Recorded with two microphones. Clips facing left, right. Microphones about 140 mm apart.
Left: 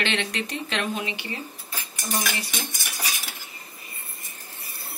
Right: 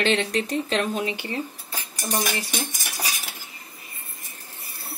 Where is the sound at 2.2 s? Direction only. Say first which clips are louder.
Right 3 dB; 40° right (ahead or behind).